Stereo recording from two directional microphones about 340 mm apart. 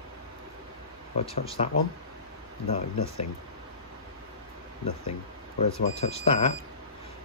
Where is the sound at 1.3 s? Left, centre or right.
Centre.